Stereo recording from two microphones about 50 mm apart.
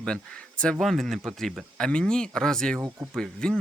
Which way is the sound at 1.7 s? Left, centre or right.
Centre.